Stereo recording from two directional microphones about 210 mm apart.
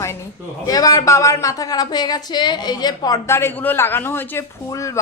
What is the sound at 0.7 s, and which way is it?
A woman's voice, 15° left (ahead or behind).